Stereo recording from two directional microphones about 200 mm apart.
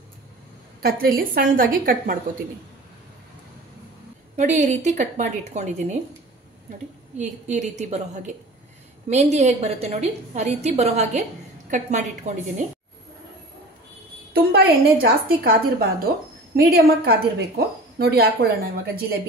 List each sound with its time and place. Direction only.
0.8 s a woman's voice: 45° right (ahead or behind)
4.4 s a woman's voice: 35° right (ahead or behind)
7.2 s a woman's voice: 35° right (ahead or behind)
14.3 s a woman's voice: 50° right (ahead or behind)